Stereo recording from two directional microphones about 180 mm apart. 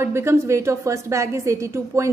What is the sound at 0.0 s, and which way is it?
A woman's voice, 15° right (ahead or behind).